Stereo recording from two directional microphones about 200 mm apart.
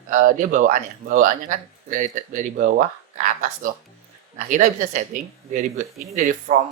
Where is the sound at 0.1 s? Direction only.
40° right (ahead or behind).